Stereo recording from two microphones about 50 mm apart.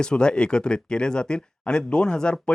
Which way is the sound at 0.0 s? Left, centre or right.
Centre.